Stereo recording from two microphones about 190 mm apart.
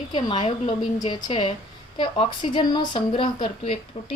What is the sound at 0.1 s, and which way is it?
A woman's voice, 25° left (ahead or behind).